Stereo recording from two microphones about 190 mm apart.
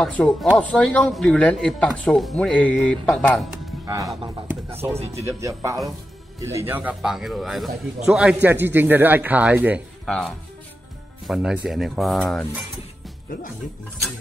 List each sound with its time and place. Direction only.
0.0 s a man's voice: 5° left (ahead or behind)
3.8 s speech: 15° right (ahead or behind)
4.7 s speech: 30° right (ahead or behind)
5.2 s a man's voice: 15° right (ahead or behind)
10.0 s a man's voice: 5° left (ahead or behind)